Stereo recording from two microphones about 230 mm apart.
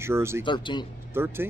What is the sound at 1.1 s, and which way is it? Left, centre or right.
Speech, centre.